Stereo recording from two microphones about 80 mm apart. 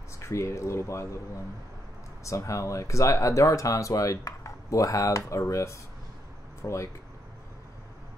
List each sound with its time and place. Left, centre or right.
0.2 s speech: left